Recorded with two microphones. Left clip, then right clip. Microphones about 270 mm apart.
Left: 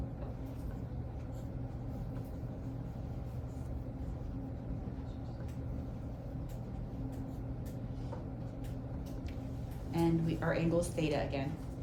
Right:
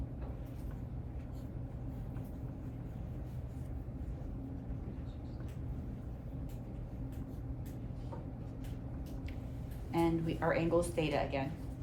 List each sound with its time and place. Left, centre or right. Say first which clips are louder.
9.9 s a woman's voice: even; right